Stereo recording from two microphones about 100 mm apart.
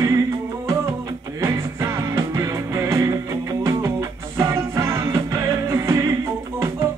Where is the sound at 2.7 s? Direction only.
30° right (ahead or behind).